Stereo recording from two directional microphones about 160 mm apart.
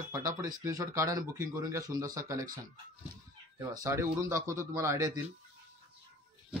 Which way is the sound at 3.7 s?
20° right (ahead or behind).